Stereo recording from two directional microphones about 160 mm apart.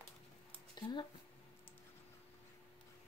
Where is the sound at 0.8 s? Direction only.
25° left (ahead or behind).